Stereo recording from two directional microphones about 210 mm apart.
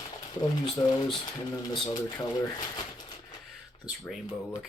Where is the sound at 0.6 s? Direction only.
20° left (ahead or behind).